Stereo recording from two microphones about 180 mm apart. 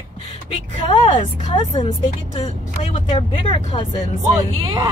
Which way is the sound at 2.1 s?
40° left (ahead or behind).